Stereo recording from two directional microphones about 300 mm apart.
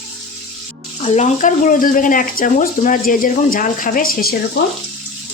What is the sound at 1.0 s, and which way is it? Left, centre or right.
Speech, left.